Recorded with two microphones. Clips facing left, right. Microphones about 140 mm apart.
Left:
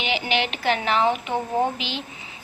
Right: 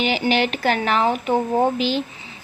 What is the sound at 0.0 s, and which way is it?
A woman's voice, 40° right (ahead or behind).